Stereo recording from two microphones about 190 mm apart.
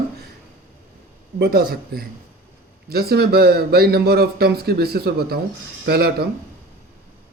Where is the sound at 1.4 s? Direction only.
55° right (ahead or behind).